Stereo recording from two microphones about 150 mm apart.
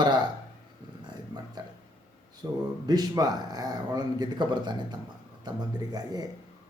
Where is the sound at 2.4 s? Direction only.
25° right (ahead or behind).